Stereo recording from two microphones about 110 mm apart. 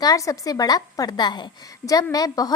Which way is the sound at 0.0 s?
30° left (ahead or behind).